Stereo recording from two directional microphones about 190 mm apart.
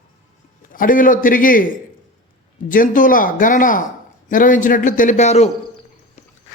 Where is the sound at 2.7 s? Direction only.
45° left (ahead or behind).